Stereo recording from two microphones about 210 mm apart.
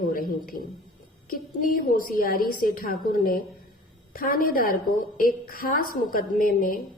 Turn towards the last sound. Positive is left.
turn(degrees=40)  # may be behind; listen again after turning